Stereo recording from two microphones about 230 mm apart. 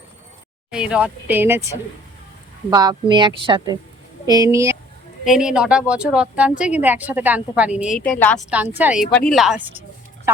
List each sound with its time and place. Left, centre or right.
0.7 s a woman's voice: centre
2.6 s a woman's voice: centre
5.2 s a woman's voice: centre
8.2 s speech: centre
8.4 s a woman's voice: centre